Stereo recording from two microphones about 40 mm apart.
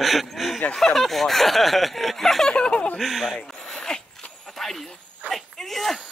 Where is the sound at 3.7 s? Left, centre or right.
Centre.